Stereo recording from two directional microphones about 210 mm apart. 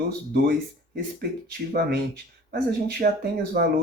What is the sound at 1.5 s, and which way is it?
Speech, 50° right (ahead or behind).